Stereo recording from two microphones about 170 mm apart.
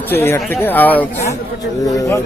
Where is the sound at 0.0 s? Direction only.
10° left (ahead or behind).